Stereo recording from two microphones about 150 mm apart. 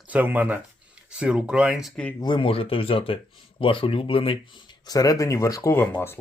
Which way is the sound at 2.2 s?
35° left (ahead or behind).